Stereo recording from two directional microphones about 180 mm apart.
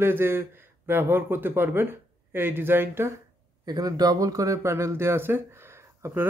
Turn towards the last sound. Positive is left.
turn(degrees=-15)  # may be behind; listen again after turning